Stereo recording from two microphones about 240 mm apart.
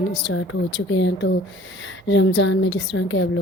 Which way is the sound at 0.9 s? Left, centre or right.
Left.